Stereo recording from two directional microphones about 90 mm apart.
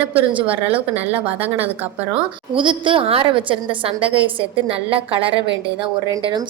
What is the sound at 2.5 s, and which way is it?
A woman's voice, 70° right (ahead or behind).